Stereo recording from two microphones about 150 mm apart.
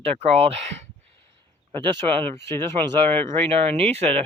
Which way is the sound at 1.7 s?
35° right (ahead or behind).